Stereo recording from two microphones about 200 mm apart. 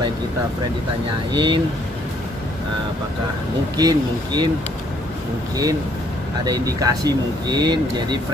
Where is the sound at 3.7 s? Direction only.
20° right (ahead or behind).